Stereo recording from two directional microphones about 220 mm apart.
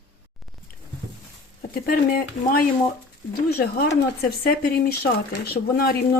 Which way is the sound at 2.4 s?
40° left (ahead or behind).